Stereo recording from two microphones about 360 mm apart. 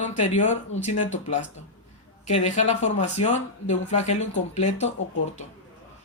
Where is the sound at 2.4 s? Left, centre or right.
Centre.